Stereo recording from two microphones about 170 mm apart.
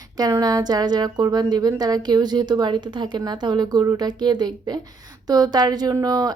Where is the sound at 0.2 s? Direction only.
20° right (ahead or behind).